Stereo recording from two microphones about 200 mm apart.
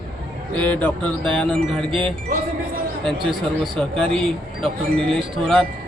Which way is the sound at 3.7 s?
5° left (ahead or behind).